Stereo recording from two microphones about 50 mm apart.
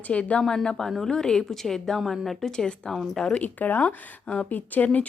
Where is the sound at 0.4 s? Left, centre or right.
Centre.